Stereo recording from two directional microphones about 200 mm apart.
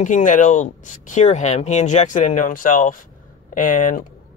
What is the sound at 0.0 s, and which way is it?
Speech, 40° left (ahead or behind).